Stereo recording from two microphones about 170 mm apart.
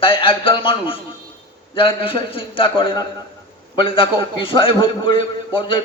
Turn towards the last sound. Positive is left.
turn(degrees=30)  # may be behind; listen again after turning